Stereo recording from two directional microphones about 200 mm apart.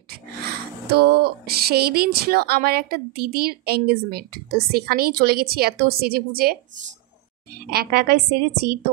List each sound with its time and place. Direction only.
0.5 s speech: 50° right (ahead or behind)
7.7 s speech: 50° right (ahead or behind)